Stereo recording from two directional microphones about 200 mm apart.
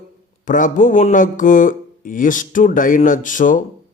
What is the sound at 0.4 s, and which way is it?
Speech, 40° left (ahead or behind).